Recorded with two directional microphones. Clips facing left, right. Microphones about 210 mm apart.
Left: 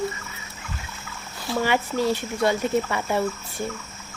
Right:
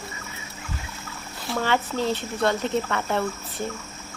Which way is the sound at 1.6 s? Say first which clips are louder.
Left 2 dB; 10° left (ahead or behind).